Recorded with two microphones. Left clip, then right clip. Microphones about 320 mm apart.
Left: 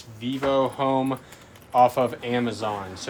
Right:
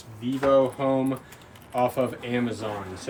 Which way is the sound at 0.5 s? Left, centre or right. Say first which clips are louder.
Right 1 dB; centre.